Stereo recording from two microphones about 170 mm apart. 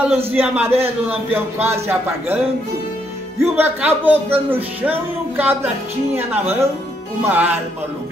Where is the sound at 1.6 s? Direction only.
15° right (ahead or behind).